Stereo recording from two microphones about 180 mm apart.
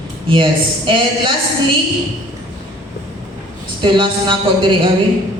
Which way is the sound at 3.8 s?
25° right (ahead or behind).